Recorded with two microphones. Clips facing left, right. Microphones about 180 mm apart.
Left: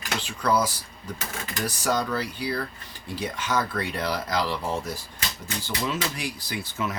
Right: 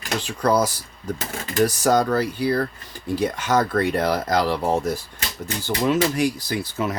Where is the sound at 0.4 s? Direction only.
40° right (ahead or behind).